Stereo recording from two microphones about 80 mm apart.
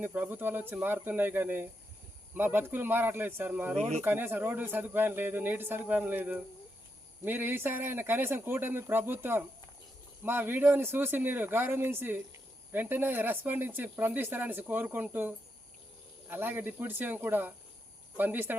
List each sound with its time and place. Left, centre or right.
0.0 s speech: right